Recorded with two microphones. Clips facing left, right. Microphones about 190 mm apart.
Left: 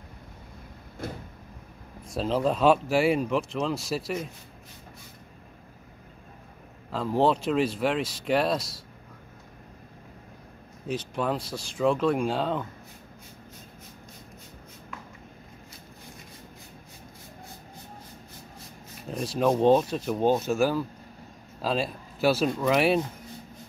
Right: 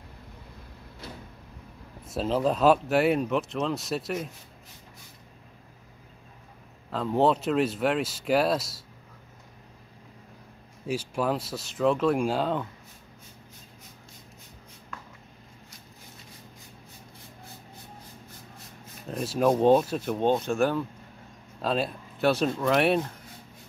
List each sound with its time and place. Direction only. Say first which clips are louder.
1.0 s vehicle: left 7 dB; 50° left (ahead or behind)
2.1 s speech: even; centre (ahead or behind)
6.9 s speech: even; centre (ahead or behind)
10.9 s speech: right 1 dB; 5° right (ahead or behind)
19.0 s a man's voice: right 1 dB; 5° right (ahead or behind)